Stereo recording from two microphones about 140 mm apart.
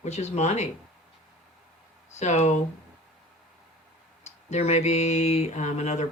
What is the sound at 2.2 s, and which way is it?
Speech, 55° left (ahead or behind).